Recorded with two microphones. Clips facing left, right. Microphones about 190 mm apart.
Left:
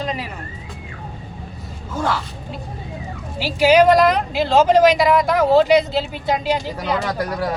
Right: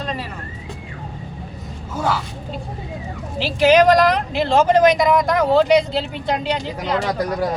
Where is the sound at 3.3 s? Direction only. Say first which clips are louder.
Even; 10° left (ahead or behind).